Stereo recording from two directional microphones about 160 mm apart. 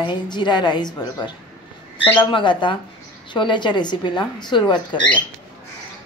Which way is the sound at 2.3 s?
30° left (ahead or behind).